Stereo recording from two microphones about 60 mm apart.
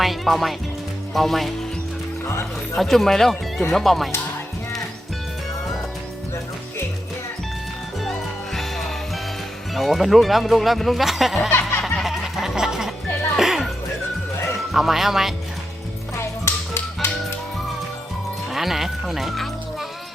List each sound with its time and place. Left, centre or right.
0.0 s speech: centre
2.7 s speech: centre
8.5 s music: centre
9.7 s speech: centre
11.8 s music: centre
14.7 s speech: centre
16.1 s music: left
18.5 s speech: centre